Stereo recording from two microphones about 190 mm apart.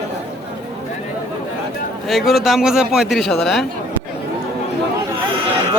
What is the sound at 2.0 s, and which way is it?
Speech, centre (ahead or behind).